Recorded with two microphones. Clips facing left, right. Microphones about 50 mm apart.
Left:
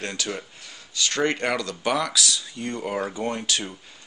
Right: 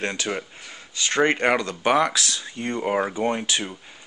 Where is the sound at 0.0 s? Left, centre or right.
Right.